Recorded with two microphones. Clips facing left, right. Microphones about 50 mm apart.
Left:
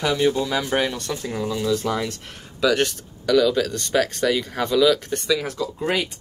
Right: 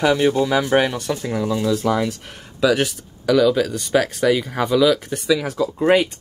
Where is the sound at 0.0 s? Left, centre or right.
Centre.